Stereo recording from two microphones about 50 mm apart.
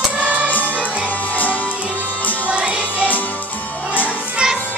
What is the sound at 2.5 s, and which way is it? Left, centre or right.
Music, right.